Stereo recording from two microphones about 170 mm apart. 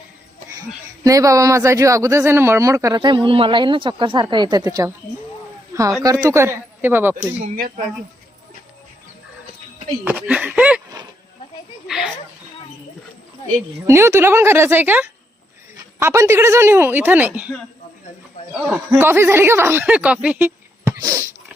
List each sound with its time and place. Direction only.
1.0 s speech: 20° right (ahead or behind)
6.0 s speech: 20° right (ahead or behind)
10.0 s speech: 10° right (ahead or behind)
11.9 s speech: 5° right (ahead or behind)
13.8 s speech: 15° right (ahead or behind)
18.5 s speech: 5° right (ahead or behind)
21.0 s a sound: 15° right (ahead or behind)